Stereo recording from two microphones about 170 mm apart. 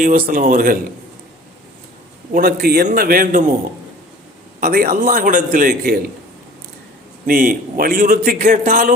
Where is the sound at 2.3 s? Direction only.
60° right (ahead or behind).